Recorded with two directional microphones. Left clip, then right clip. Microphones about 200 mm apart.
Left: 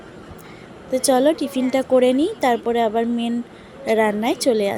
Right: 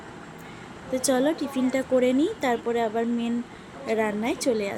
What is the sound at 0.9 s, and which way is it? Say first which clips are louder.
Speech: left 7 dB; 20° left (ahead or behind).